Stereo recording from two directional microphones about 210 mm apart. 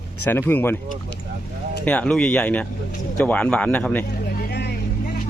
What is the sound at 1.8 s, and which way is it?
Speech, 5° left (ahead or behind).